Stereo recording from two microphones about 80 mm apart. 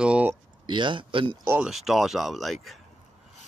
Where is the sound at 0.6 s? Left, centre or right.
Right.